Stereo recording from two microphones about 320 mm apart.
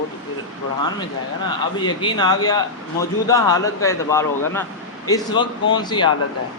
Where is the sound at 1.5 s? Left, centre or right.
Centre.